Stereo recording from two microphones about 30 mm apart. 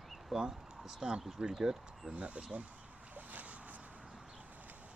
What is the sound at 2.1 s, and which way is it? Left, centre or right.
Speech, right.